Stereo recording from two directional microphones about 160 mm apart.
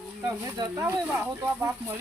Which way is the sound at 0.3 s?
20° right (ahead or behind).